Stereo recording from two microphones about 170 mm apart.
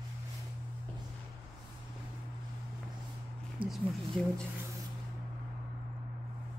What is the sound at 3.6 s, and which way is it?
Speech, 30° right (ahead or behind).